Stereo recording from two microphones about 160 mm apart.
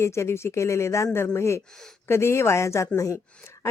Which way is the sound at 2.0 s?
15° left (ahead or behind).